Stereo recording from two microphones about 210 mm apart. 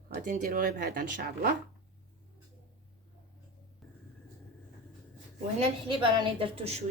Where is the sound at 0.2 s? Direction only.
35° right (ahead or behind).